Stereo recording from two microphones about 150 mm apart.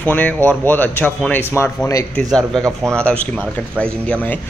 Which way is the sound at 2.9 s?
5° left (ahead or behind).